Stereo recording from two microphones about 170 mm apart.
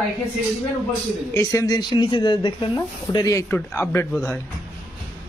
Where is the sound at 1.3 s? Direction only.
20° left (ahead or behind).